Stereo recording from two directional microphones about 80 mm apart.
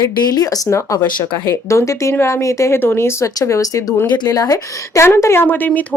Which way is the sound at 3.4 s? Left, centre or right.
Left.